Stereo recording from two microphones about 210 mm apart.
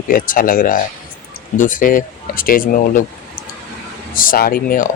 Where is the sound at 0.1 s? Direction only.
40° left (ahead or behind).